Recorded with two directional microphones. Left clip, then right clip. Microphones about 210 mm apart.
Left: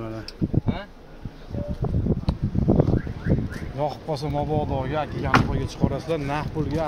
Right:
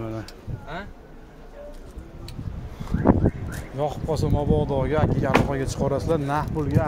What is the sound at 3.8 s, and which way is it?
Speech, 10° right (ahead or behind).